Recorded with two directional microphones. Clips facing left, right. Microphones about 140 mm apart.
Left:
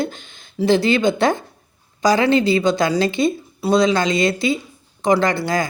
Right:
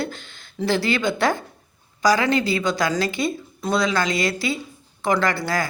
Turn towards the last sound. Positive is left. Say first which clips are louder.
# left 4 dB
turn(degrees=20)  # may be behind; listen again after turning